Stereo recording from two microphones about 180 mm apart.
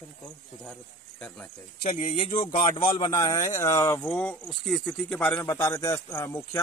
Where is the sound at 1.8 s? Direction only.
30° left (ahead or behind); by 4.0 s 15° left (ahead or behind).